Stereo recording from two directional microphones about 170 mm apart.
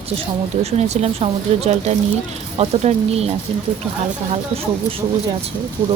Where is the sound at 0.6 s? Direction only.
40° right (ahead or behind).